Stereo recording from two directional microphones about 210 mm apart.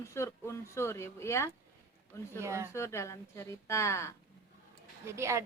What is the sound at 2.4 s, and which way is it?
Speech, 15° right (ahead or behind).